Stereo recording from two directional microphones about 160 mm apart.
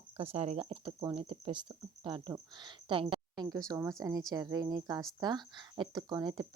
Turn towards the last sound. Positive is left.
turn(degrees=-25)  # may be behind; listen again after turning